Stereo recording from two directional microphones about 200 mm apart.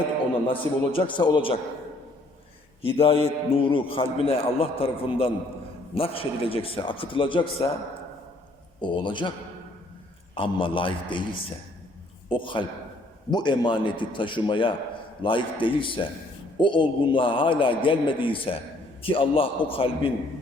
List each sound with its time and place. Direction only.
0.4 s a man's voice: 25° left (ahead or behind)
2.8 s a man's voice: 30° left (ahead or behind)
8.8 s a man's voice: 25° left (ahead or behind)
10.3 s a man's voice: 25° left (ahead or behind)